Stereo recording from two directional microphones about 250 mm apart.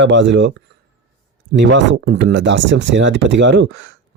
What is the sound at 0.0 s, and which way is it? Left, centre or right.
Speech, right.